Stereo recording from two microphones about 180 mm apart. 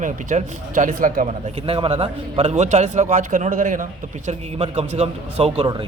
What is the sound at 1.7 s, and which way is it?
A man's voice, 30° right (ahead or behind).